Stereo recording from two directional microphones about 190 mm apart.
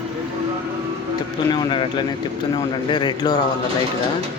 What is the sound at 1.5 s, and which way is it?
Speech, 25° left (ahead or behind).